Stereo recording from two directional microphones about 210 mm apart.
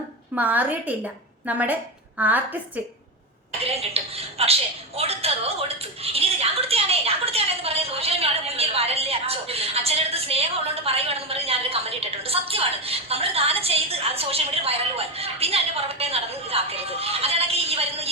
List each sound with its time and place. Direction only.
0.3 s a woman's voice: 10° right (ahead or behind)
3.6 s a woman's voice: 30° right (ahead or behind)